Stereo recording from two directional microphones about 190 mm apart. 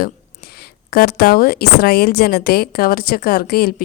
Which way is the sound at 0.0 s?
55° left (ahead or behind).